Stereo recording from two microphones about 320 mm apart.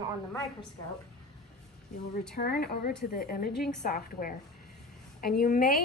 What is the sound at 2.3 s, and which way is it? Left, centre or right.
Speech, left.